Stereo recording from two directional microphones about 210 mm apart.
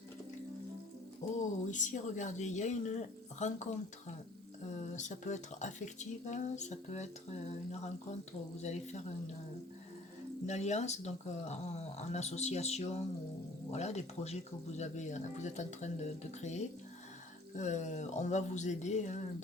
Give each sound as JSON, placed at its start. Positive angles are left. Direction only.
{"t": 1.4, "sound": "speech", "side_deg": 35}
{"t": 4.8, "sound": "speech", "side_deg": 35}
{"t": 10.4, "sound": "speech", "side_deg": 35}